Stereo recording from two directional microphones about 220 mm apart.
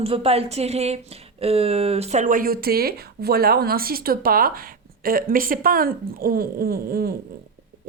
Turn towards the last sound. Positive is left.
turn(degrees=-45)  # may be behind; listen again after turning